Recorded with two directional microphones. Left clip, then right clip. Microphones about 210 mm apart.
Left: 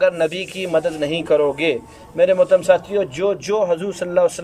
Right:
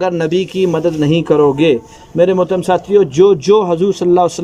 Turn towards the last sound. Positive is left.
turn(degrees=-25)  # may be behind; listen again after turning